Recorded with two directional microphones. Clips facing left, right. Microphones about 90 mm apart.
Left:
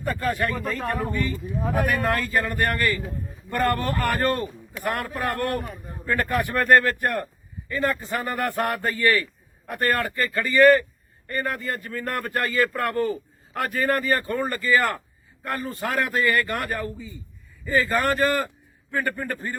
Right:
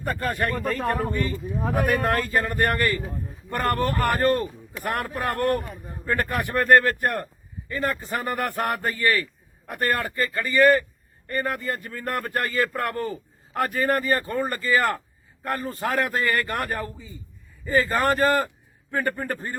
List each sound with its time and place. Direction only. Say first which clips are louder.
0.0 s a man's voice: left 1 dB; 50° right (ahead or behind)
1.1 s a man's voice: even; 40° right (ahead or behind)